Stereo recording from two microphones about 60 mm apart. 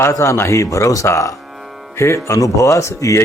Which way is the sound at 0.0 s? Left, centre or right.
Left.